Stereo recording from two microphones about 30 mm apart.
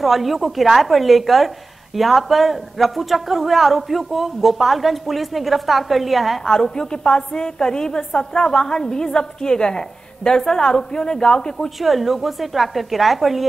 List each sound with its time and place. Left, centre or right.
0.0 s a woman's voice: centre
6.4 s a woman's voice: centre
6.7 s a woman's voice: left
11.8 s a woman's voice: centre